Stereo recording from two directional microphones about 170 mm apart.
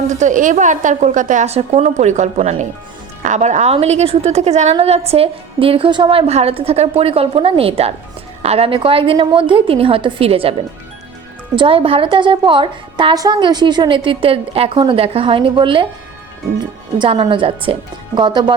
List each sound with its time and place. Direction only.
0.1 s a woman's voice: 45° right (ahead or behind)
11.5 s a woman's voice: 30° right (ahead or behind)
17.0 s a woman's voice: 30° right (ahead or behind)